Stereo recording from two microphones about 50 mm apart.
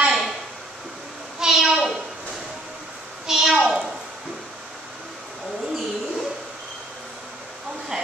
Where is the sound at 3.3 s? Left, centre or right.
Centre.